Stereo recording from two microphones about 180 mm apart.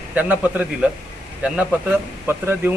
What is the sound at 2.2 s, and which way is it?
Speech, 15° right (ahead or behind).